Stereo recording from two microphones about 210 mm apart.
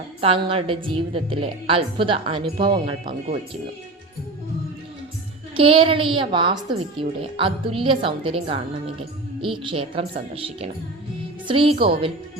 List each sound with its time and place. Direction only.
0.2 s a woman's voice: 25° right (ahead or behind)
5.5 s a woman's voice: 25° right (ahead or behind)